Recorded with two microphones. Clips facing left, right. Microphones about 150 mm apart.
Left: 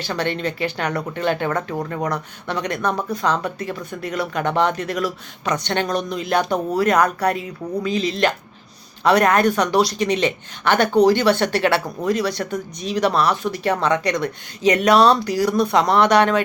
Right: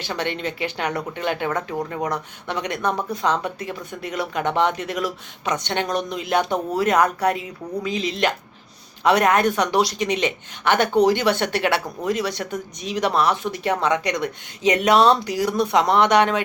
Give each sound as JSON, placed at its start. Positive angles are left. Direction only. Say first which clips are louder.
{"t": 0.0, "sound": "speech", "louder": "left 3 dB", "side_deg": -15}